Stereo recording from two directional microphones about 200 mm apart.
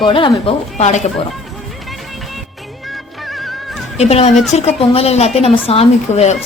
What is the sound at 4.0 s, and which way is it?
A man's voice, 30° left (ahead or behind).